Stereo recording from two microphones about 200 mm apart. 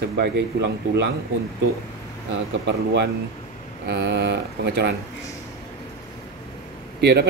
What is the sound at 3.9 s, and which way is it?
Speech, 55° right (ahead or behind).